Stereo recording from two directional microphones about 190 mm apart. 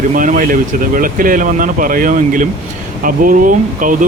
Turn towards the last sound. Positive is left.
turn(degrees=-45)  # may be behind; listen again after turning